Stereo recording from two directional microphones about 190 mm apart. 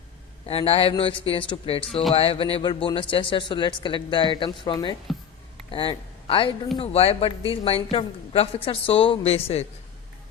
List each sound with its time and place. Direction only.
0.4 s a woman's voice: 30° left (ahead or behind)